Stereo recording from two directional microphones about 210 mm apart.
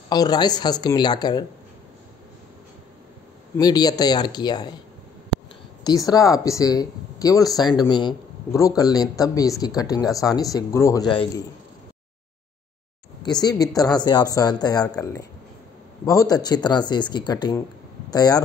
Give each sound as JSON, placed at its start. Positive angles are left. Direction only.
{"t": 0.1, "sound": "speech", "side_deg": 20}
{"t": 3.5, "sound": "speech", "side_deg": 20}
{"t": 5.9, "sound": "speech", "side_deg": 15}
{"t": 13.2, "sound": "speech", "side_deg": 20}